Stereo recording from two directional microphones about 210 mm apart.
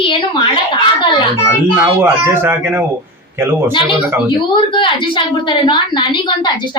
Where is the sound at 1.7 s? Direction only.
10° right (ahead or behind).